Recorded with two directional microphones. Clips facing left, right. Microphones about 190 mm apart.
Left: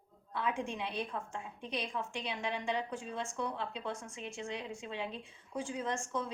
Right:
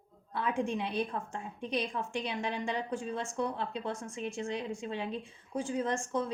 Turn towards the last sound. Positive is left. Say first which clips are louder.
# right 5 dB
turn(degrees=-40)  # may be behind; listen again after turning